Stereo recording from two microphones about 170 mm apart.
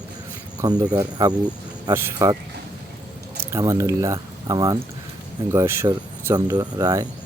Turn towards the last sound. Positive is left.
turn(degrees=-20)  # may be behind; listen again after turning